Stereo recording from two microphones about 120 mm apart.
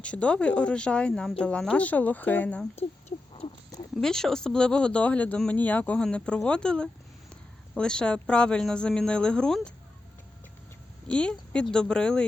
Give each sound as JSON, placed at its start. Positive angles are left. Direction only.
{"t": 0.0, "sound": "speech", "side_deg": 10}
{"t": 2.7, "sound": "rodents", "side_deg": 60}
{"t": 3.9, "sound": "speech", "side_deg": 5}
{"t": 11.1, "sound": "speech", "side_deg": 10}